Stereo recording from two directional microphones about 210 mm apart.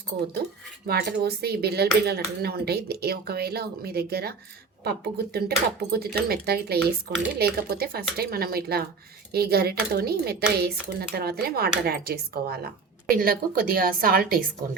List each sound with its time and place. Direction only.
0.9 s speech: 50° right (ahead or behind)